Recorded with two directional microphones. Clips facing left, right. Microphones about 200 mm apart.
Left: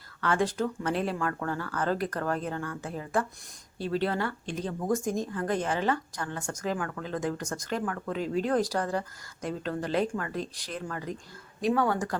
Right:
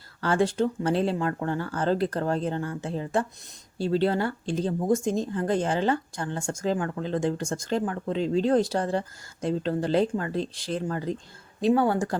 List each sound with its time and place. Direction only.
0.2 s speech: 30° right (ahead or behind)